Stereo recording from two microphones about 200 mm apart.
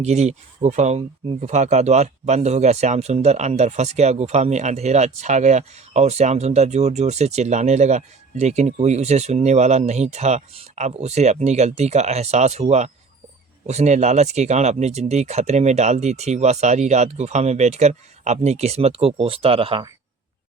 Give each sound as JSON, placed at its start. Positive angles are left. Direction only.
{"t": 0.0, "sound": "speech", "side_deg": -35}